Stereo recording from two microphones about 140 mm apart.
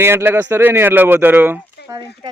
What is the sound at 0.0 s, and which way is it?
Speech, 15° right (ahead or behind).